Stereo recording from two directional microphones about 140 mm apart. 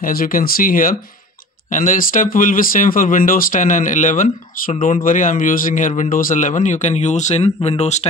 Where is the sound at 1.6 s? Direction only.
65° left (ahead or behind).